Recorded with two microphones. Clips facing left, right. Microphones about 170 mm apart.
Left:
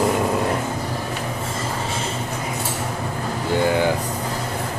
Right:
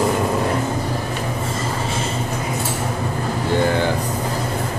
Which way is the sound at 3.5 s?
10° left (ahead or behind).